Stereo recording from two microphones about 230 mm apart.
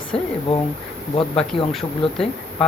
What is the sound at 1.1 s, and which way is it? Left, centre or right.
Speech, left.